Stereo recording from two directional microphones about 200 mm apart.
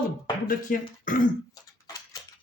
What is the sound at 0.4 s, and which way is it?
Speech, 45° left (ahead or behind).